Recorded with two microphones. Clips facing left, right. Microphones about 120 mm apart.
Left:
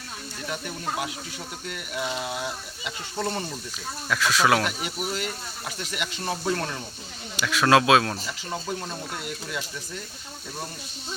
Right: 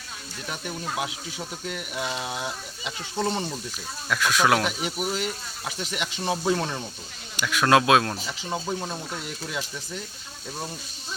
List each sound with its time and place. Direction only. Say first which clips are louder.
0.5 s speech: even; 20° right (ahead or behind)
4.1 s speech: even; centre (ahead or behind)
5.1 s speech: right 1 dB; 25° right (ahead or behind)
7.3 s speech: even; centre (ahead or behind)